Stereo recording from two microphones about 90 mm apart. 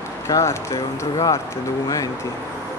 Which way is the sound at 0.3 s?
35° left (ahead or behind).